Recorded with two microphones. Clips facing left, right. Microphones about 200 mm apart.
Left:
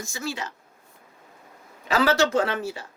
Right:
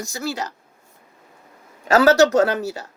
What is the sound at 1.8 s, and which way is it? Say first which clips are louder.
Speech: right 7 dB; 45° right (ahead or behind).